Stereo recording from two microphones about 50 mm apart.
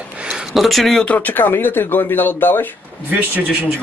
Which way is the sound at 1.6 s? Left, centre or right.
Left.